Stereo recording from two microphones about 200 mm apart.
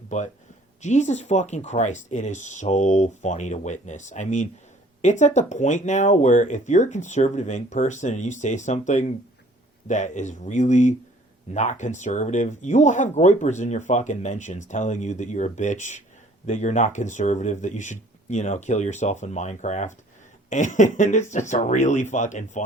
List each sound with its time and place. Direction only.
0.8 s speech: 35° left (ahead or behind)